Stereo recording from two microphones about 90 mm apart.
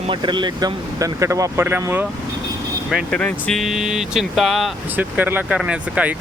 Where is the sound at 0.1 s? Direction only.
60° right (ahead or behind); by 1.6 s 35° right (ahead or behind).